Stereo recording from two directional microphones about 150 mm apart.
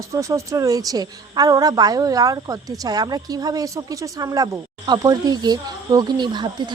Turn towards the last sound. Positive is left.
turn(degrees=-30)  # may be behind; listen again after turning